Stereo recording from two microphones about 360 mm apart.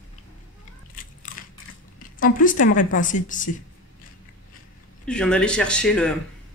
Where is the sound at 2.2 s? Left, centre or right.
Left.